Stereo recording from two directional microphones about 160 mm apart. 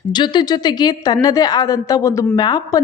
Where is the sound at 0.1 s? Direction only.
25° left (ahead or behind).